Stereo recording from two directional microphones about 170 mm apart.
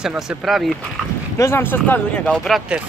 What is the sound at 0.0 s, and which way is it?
Speech, 5° right (ahead or behind).